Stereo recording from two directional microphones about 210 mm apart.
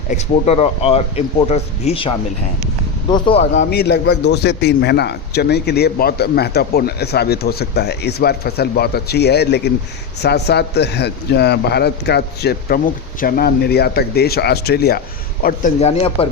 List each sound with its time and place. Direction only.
0.1 s speech: 30° left (ahead or behind)
3.7 s a man's voice: 50° left (ahead or behind)
15.4 s speech: 35° left (ahead or behind)